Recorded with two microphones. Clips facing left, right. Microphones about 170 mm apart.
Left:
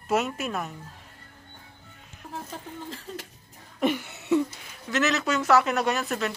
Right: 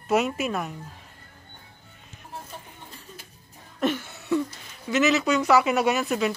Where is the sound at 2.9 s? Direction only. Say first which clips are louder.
Left 7 dB; 90° left.